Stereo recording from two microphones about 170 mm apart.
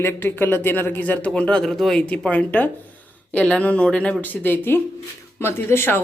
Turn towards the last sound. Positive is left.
turn(degrees=15)  # may be behind; listen again after turning